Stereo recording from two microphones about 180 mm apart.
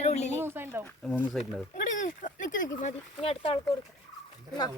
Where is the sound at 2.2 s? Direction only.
45° left (ahead or behind).